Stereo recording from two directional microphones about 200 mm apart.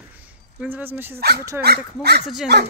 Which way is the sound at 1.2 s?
50° right (ahead or behind).